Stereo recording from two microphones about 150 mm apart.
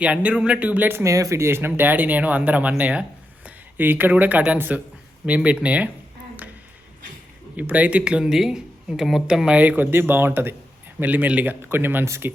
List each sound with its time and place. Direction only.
0.0 s speech: 10° right (ahead or behind)
7.5 s speech: 10° right (ahead or behind)